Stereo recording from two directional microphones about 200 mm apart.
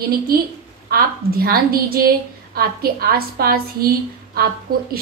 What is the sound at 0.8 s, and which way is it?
A woman's voice, 50° right (ahead or behind).